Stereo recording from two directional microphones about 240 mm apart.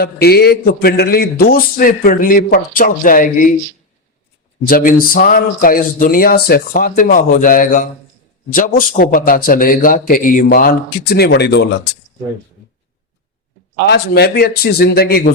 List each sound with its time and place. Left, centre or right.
0.0 s a man's voice: left
4.6 s a man's voice: left
13.9 s a man's voice: left